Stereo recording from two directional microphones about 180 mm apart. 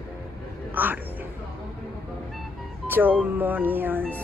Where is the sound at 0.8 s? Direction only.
10° right (ahead or behind).